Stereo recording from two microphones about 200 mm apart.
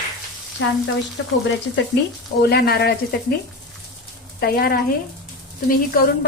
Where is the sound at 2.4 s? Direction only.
50° left (ahead or behind).